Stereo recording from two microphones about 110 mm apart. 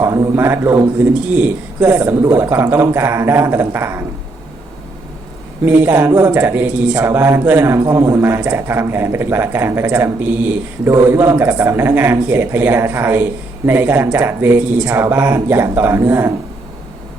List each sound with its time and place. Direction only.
0.0 s a man's voice: 25° right (ahead or behind)
5.6 s speech: 15° right (ahead or behind)
6.1 s speech: 25° right (ahead or behind)
6.3 s speech: 15° right (ahead or behind)